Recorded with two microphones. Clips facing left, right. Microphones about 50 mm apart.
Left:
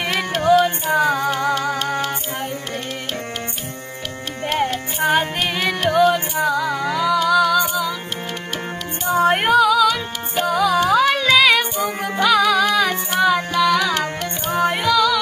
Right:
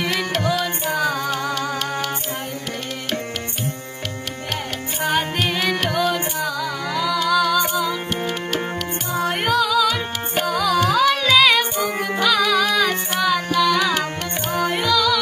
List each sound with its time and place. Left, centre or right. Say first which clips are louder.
0.2 s music: left 6 dB; left
0.9 s music: left 4 dB; centre
4.5 s music: left 8 dB; left
5.0 s music: left 2 dB; centre
9.0 s music: left 7 dB; left
9.5 s music: left 2 dB; centre